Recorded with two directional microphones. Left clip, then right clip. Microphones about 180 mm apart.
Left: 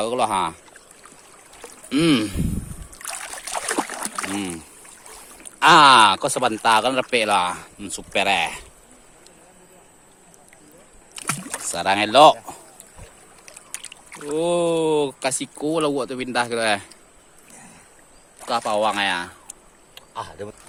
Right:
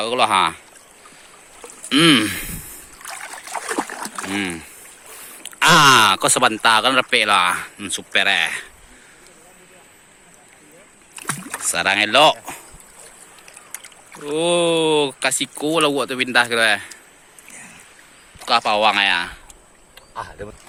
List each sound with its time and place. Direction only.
0.0 s speech: 10° left (ahead or behind)
1.6 s a sound: centre (ahead or behind)
3.0 s boat: 25° left (ahead or behind)
3.8 s splash: 25° left (ahead or behind)
4.4 s speech: centre (ahead or behind)
11.1 s rowboat: 45° left (ahead or behind)
11.6 s speech: 5° left (ahead or behind)
14.3 s speech: 5° left (ahead or behind)
18.3 s speech: 5° left (ahead or behind)
20.1 s speech: 25° left (ahead or behind)